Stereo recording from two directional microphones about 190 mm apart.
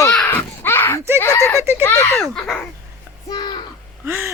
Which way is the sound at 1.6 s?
15° right (ahead or behind).